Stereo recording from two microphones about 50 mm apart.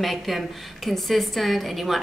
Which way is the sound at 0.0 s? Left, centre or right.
Centre.